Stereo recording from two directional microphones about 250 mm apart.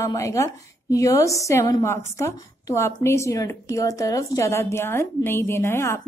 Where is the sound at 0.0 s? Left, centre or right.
Centre.